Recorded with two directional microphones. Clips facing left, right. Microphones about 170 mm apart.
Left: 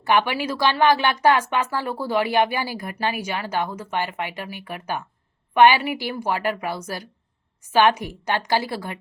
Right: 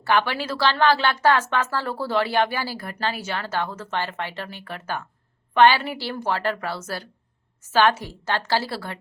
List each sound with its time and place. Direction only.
0.0 s speech: 15° left (ahead or behind)